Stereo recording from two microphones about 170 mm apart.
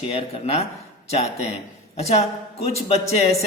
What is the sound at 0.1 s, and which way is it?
Speech, 35° left (ahead or behind).